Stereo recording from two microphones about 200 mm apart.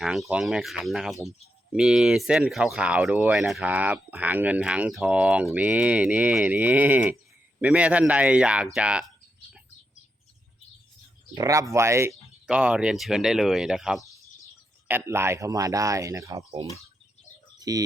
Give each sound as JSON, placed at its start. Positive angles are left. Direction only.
{"t": 0.0, "sound": "speech", "side_deg": -5}
{"t": 11.3, "sound": "speech", "side_deg": -15}